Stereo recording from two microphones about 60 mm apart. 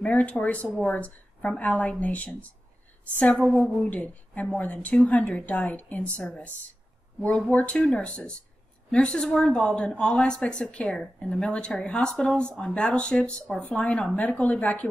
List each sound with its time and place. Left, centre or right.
0.0 s a woman's voice: left
3.3 s speech: centre
3.9 s a woman's voice: left